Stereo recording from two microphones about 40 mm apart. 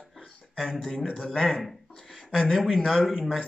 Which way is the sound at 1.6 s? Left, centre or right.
Centre.